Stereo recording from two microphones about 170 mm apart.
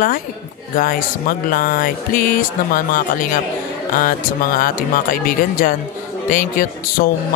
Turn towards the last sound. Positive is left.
turn(degrees=55)  # may be behind; listen again after turning